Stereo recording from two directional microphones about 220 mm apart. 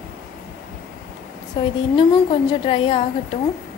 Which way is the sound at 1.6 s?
20° left (ahead or behind).